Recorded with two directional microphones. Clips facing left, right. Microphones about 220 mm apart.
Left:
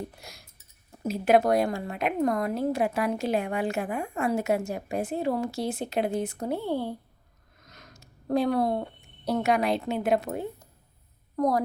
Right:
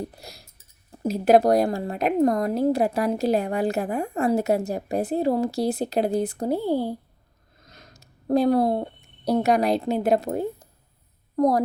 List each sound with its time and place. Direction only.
0.2 s a woman's voice: 35° right (ahead or behind)